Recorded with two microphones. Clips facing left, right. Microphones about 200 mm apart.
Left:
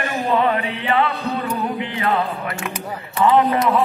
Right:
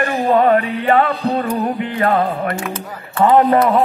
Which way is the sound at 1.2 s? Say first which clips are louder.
Right 5 dB; 35° right (ahead or behind).